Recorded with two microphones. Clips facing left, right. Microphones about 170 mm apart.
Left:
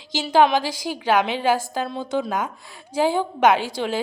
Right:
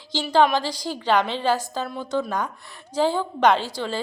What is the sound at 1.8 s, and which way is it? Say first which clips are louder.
A woman's voice: left 1 dB; 25° left (ahead or behind).